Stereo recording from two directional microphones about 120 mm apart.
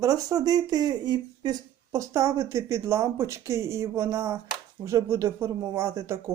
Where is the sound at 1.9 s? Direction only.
25° right (ahead or behind).